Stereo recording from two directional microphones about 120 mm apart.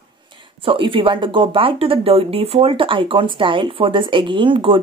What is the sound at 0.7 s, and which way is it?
Speech, 45° right (ahead or behind).